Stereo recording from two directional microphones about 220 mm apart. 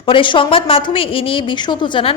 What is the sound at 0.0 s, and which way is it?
A woman's voice, 25° left (ahead or behind).